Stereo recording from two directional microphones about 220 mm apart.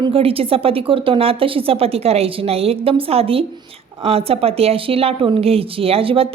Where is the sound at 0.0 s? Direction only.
25° right (ahead or behind).